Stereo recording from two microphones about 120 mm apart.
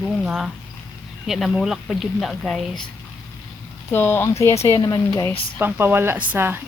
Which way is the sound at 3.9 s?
20° left (ahead or behind).